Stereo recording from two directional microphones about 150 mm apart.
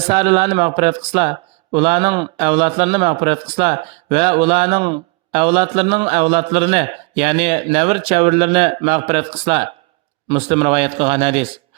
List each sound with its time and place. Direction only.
0.1 s speech: 40° right (ahead or behind)